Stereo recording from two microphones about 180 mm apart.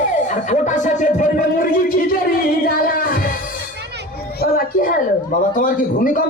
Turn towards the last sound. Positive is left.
turn(degrees=50)  # may be behind; listen again after turning